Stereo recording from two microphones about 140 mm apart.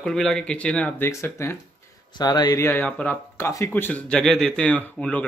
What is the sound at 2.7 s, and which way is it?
Speech, 10° left (ahead or behind).